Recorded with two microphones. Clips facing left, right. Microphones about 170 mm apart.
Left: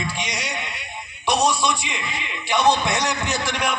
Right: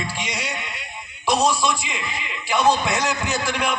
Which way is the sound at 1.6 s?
10° right (ahead or behind).